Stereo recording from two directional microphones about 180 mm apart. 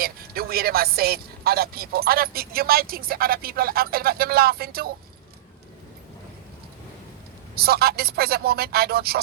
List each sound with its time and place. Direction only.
0.0 s speech: 55° right (ahead or behind)
7.5 s speech: 60° right (ahead or behind)